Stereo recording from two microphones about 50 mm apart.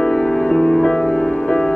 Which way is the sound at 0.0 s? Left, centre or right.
Centre.